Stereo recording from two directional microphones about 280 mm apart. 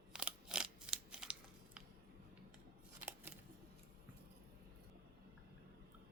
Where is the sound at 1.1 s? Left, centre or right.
Centre.